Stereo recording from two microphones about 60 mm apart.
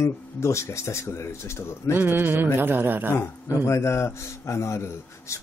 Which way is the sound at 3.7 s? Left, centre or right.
Left.